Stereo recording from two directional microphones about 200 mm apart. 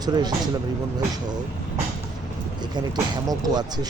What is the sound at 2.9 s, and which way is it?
Speech, 20° right (ahead or behind).